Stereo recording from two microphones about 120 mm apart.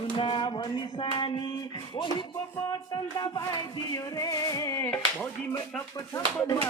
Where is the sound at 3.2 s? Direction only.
30° left (ahead or behind).